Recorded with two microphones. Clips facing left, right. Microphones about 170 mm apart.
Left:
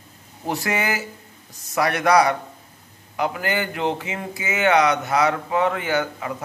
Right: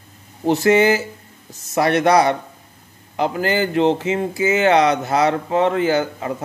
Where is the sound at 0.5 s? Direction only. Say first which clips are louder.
Right 10 dB; 25° right (ahead or behind).